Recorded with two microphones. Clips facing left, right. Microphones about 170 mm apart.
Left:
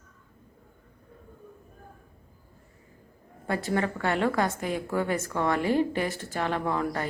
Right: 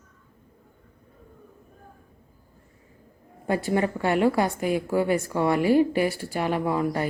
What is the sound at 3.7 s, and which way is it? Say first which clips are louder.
A woman's voice: right 3 dB; 15° right (ahead or behind).